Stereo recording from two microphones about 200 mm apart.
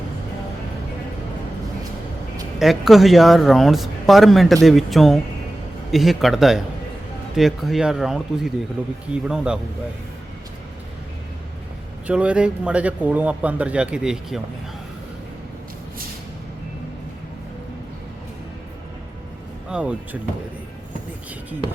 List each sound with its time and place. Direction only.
2.6 s speech: centre (ahead or behind)
12.0 s speech: 5° right (ahead or behind)
19.7 s speech: 5° right (ahead or behind)